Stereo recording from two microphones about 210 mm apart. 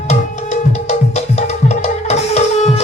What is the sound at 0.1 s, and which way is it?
Music, 35° left (ahead or behind).